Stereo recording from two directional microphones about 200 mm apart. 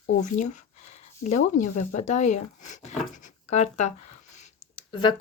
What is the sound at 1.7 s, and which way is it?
Speech, 35° left (ahead or behind).